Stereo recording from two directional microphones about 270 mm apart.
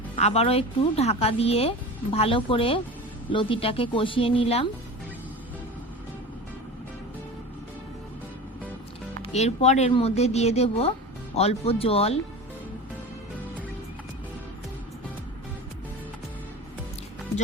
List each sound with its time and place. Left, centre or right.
0.2 s speech: left
9.2 s speech: left